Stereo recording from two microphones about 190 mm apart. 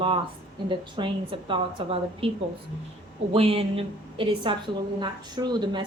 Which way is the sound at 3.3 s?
30° right (ahead or behind).